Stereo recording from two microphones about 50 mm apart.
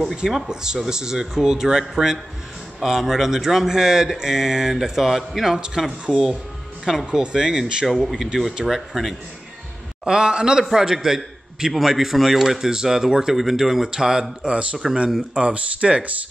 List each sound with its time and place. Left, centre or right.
0.0 s a man's voice: centre
7.9 s speech: centre
10.0 s a man's voice: centre
14.4 s speech: right